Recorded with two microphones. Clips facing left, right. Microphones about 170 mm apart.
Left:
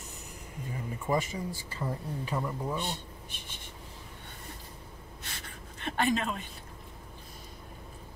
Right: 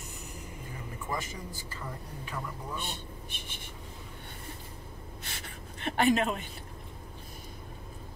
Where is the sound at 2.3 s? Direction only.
25° left (ahead or behind).